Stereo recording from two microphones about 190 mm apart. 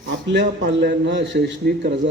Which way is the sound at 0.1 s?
60° right (ahead or behind).